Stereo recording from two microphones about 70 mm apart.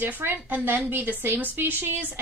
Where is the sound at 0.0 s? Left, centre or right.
Right.